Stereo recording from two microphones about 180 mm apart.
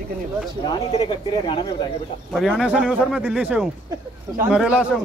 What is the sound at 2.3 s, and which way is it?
Speech, centre (ahead or behind).